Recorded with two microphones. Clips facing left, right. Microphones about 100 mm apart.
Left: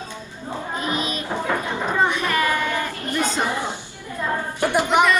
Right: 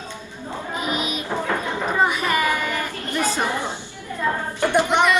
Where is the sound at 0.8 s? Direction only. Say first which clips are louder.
Right 1 dB; 10° right (ahead or behind).